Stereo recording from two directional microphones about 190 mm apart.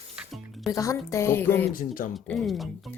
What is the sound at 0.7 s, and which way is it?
Music, 15° left (ahead or behind).